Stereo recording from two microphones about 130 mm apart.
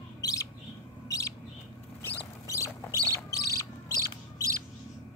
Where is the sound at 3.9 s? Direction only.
25° right (ahead or behind).